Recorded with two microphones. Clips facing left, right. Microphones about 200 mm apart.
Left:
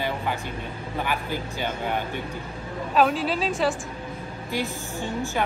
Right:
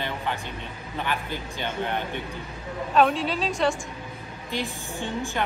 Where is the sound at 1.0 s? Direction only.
10° left (ahead or behind).